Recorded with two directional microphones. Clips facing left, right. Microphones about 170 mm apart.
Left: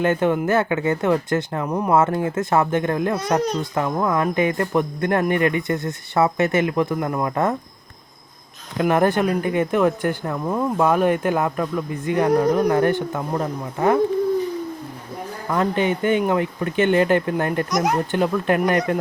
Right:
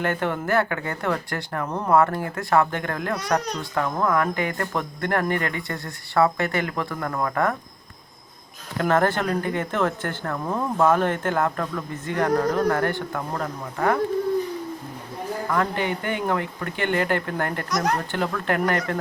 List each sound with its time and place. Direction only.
0.0 s speech: 20° left (ahead or behind)
8.8 s speech: 15° left (ahead or behind)
15.4 s speech: 20° left (ahead or behind)